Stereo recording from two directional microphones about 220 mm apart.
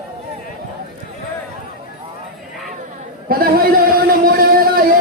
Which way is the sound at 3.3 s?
40° right (ahead or behind).